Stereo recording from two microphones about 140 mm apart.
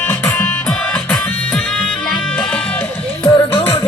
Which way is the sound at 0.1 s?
10° left (ahead or behind).